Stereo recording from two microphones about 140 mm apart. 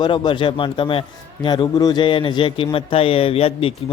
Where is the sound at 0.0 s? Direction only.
35° left (ahead or behind).